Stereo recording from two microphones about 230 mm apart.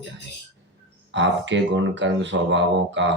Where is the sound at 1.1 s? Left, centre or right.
Right.